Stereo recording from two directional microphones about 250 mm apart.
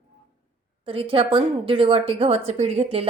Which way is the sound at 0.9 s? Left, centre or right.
Right.